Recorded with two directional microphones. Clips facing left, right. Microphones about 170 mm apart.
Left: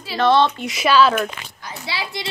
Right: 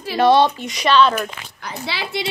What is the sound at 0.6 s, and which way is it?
Speech, 5° left (ahead or behind).